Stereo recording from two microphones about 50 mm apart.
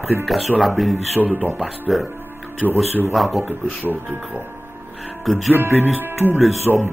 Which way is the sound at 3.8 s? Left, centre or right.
Right.